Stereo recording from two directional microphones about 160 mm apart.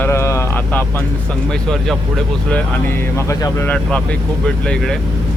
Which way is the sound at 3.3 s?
15° left (ahead or behind).